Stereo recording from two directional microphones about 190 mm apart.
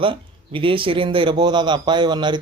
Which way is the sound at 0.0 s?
25° right (ahead or behind).